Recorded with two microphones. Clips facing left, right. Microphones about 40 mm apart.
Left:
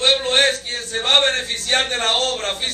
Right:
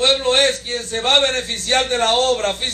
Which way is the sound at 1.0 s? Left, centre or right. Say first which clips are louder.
Even; left.